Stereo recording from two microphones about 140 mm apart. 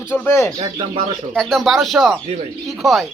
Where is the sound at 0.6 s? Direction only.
35° right (ahead or behind).